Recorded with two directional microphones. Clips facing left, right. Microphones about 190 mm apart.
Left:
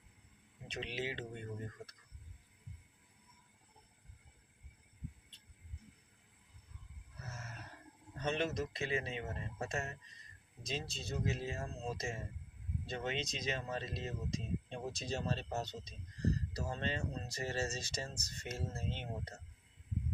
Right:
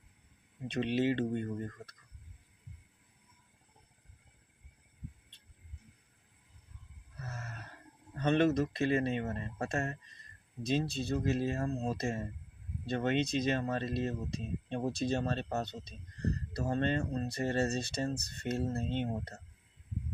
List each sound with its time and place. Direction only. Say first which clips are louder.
0.7 s speech: right 11 dB; 60° right (ahead or behind)
7.3 s a sound: right 4 dB; 60° right (ahead or behind)
8.2 s speech: right 9 dB; 60° right (ahead or behind)